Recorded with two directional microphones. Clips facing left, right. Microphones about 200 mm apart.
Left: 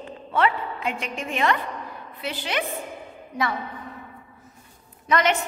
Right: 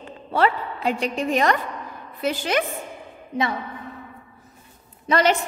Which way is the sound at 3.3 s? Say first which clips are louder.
Right 3 dB; 25° right (ahead or behind).